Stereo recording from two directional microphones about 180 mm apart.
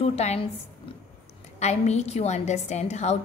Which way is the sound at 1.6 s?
40° left (ahead or behind).